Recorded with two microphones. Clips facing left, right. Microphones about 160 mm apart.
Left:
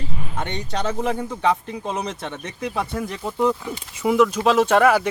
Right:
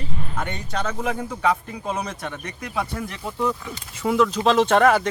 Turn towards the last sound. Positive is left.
turn(degrees=5)  # may be behind; listen again after turning